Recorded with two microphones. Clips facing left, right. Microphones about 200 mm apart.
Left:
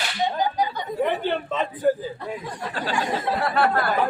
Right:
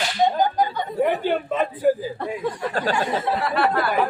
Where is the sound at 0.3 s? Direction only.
50° right (ahead or behind).